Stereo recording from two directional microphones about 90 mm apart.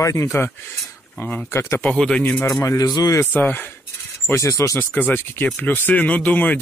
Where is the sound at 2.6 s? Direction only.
40° left (ahead or behind).